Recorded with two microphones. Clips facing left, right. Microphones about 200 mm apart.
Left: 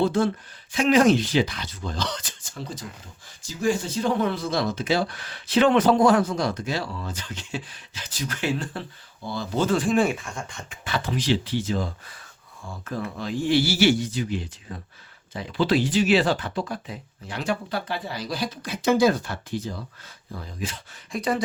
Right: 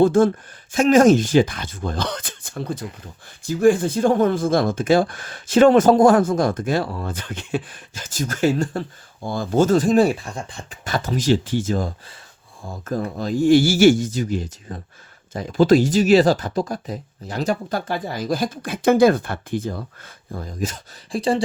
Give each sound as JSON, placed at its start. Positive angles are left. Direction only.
{"t": 0.0, "sound": "speech", "side_deg": -50}
{"t": 21.1, "sound": "speech", "side_deg": -30}